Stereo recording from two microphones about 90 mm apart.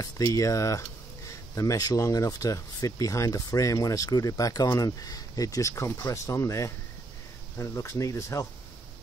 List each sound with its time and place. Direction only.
0.0 s speech: 40° left (ahead or behind)